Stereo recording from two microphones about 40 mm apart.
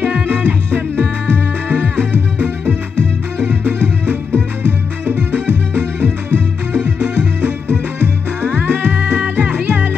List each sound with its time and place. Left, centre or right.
0.0 s music: right
5.9 s music: right
8.4 s music: right